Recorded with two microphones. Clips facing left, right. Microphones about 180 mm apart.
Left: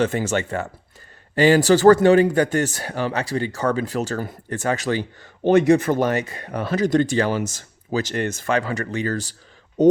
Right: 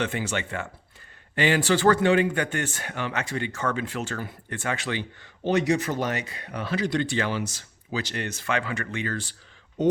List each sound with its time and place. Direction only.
0.0 s speech: 40° left (ahead or behind)
5.4 s speech: 55° left (ahead or behind)